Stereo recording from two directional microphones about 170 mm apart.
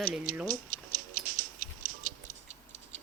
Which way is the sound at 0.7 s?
50° right (ahead or behind).